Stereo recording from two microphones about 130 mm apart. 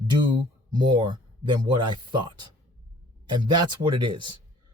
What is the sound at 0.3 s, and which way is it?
Speech, 35° right (ahead or behind).